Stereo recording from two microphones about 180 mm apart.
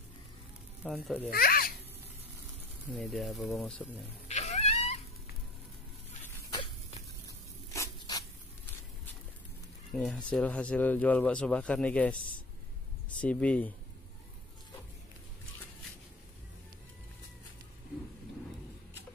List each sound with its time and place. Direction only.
0.8 s speech: centre (ahead or behind)
1.3 s a child's voice: 55° left (ahead or behind)
2.9 s speech: centre (ahead or behind)
4.3 s music: 40° left (ahead or behind)
6.5 s dog: 30° left (ahead or behind)
7.2 s a sound: 15° left (ahead or behind)
9.9 s speech: 5° left (ahead or behind)
13.2 s speech: 5° left (ahead or behind)